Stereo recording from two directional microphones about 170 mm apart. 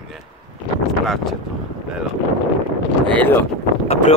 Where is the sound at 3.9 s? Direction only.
45° left (ahead or behind).